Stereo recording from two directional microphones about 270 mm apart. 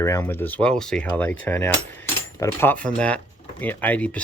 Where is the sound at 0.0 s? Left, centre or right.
Centre.